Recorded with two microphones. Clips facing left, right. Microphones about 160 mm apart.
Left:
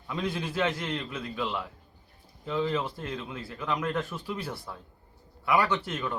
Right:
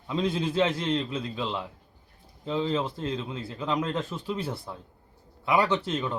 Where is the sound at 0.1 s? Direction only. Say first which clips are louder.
Right 5 dB; 25° right (ahead or behind).